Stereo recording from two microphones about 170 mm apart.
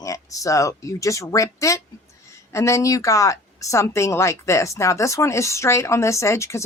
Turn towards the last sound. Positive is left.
turn(degrees=15)  # may be behind; listen again after turning